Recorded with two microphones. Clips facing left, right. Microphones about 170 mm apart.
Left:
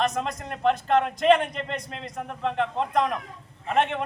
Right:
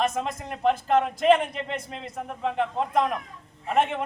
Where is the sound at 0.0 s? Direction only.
5° right (ahead or behind).